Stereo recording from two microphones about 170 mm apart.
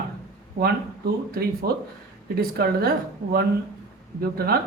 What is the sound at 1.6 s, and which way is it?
Speech, 65° right (ahead or behind).